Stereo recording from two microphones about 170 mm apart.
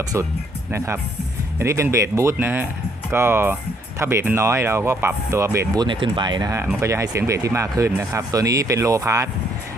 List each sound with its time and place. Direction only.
1.5 s speech: 15° right (ahead or behind)